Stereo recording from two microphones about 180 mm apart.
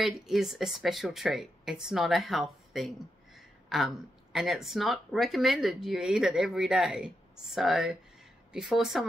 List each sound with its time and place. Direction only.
0.0 s speech: centre (ahead or behind)